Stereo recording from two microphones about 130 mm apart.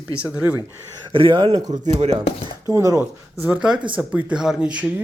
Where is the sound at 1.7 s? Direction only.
60° right (ahead or behind).